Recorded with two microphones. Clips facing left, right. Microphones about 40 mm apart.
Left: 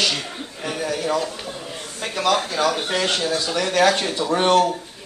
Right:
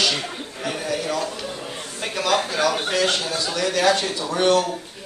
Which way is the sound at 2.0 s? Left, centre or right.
Centre.